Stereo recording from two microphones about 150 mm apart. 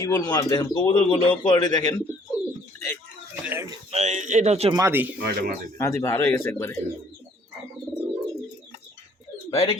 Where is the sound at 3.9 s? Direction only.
45° right (ahead or behind).